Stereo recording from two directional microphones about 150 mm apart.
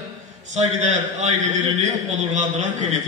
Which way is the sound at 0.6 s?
50° right (ahead or behind).